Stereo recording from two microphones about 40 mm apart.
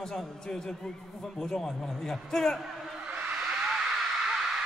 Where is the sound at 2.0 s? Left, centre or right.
Centre.